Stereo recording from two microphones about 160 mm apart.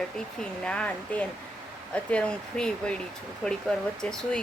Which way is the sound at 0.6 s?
5° left (ahead or behind).